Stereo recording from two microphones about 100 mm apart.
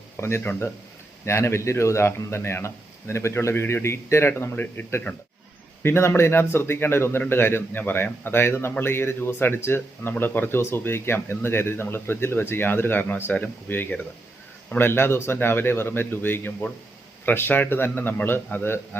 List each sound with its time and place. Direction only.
0.2 s speech: 25° left (ahead or behind)